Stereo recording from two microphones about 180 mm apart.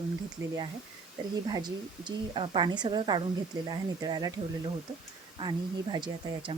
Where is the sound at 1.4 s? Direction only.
25° right (ahead or behind).